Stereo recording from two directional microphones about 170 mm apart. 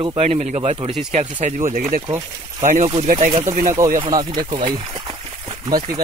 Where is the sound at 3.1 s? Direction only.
40° right (ahead or behind).